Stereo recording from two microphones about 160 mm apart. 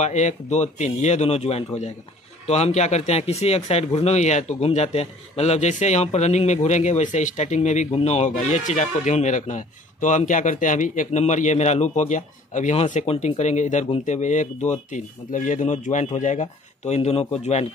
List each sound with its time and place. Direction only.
0.0 s speech: 45° left (ahead or behind)